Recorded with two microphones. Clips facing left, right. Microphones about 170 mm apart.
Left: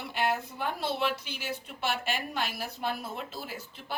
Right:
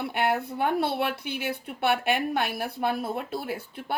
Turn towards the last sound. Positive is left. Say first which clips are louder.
# right 8 dB
turn(degrees=-55)  # may be behind; listen again after turning